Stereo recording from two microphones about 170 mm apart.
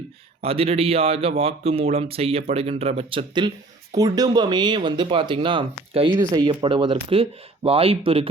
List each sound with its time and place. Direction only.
0.4 s speech: 35° right (ahead or behind)